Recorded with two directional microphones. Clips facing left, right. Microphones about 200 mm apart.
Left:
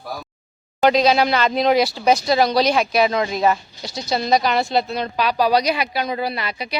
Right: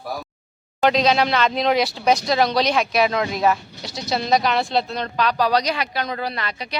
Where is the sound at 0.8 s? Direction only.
Centre (ahead or behind).